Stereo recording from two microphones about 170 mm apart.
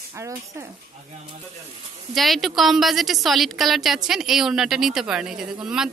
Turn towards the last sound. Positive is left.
turn(degrees=-5)  # may be behind; listen again after turning